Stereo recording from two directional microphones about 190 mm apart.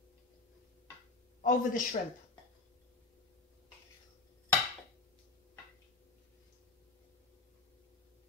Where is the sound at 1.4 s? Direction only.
45° left (ahead or behind).